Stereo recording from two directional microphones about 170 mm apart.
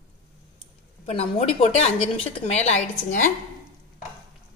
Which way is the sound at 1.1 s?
35° left (ahead or behind).